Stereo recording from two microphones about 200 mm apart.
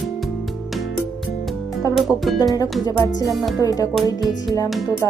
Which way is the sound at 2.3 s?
20° left (ahead or behind).